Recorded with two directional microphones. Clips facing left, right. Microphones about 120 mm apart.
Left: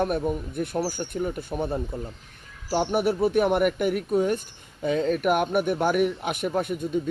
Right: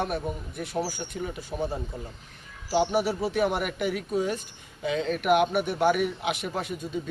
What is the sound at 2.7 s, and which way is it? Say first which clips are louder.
Speech: left 1 dB; 50° left (ahead or behind).